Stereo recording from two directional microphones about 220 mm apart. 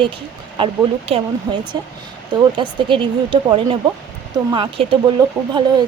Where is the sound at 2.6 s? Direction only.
20° right (ahead or behind).